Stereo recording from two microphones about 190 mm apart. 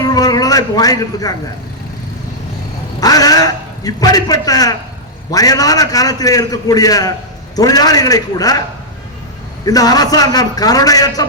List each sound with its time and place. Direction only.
0.0 s a sound: 20° left (ahead or behind)
3.0 s a man's voice: 20° left (ahead or behind)
9.6 s a man's voice: 20° left (ahead or behind)